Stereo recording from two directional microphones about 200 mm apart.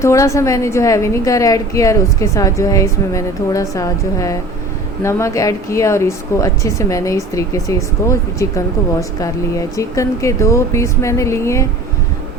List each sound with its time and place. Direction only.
0.0 s a woman's voice: 15° left (ahead or behind)